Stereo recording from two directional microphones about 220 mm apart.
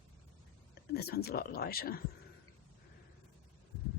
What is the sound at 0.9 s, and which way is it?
Speech, 45° left (ahead or behind).